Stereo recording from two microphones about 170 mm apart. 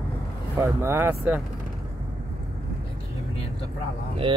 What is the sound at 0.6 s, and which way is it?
Speech, 15° right (ahead or behind).